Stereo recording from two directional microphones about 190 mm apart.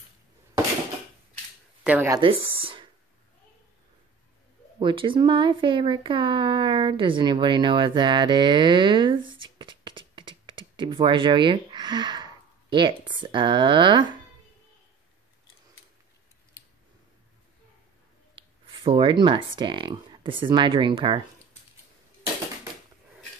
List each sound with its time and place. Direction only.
1.9 s speech: 10° right (ahead or behind)
2.1 s speech: 30° right (ahead or behind)
4.7 s speech: 25° right (ahead or behind)
18.3 s speech: 25° right (ahead or behind)